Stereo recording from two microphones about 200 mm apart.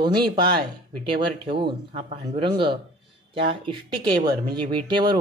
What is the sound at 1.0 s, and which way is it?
Speech, 25° right (ahead or behind).